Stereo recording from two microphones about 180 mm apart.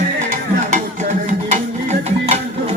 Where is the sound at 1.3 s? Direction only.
40° right (ahead or behind).